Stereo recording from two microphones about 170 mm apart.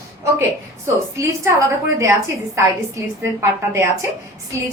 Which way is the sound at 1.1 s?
15° right (ahead or behind).